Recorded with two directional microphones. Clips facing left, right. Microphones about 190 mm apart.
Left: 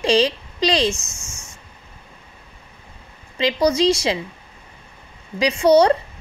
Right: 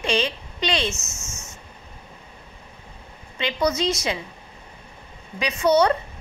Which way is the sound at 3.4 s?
35° left (ahead or behind).